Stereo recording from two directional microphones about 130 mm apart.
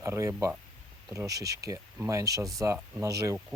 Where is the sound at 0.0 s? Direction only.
25° right (ahead or behind).